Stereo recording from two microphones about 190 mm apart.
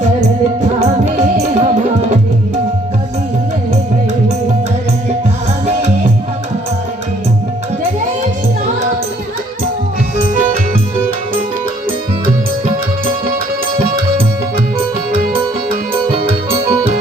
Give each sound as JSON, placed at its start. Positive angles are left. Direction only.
{"t": 0.8, "sound": "music", "side_deg": -35}
{"t": 5.6, "sound": "music", "side_deg": -35}